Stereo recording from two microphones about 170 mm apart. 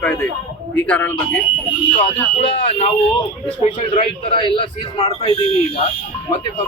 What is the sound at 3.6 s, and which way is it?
A man's voice, 35° left (ahead or behind).